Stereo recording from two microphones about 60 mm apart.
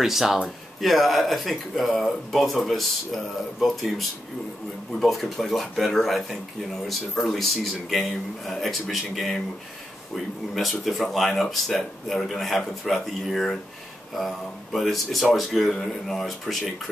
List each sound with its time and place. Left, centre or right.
0.0 s speech: centre
4.9 s speech: centre